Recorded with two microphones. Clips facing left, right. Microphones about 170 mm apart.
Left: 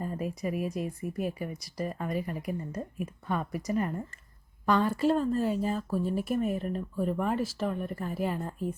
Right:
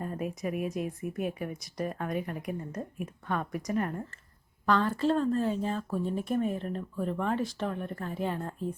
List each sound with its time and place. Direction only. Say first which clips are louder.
0.0 s speech: left 1 dB; centre (ahead or behind)
4.6 s speech: left 1 dB; 10° left (ahead or behind)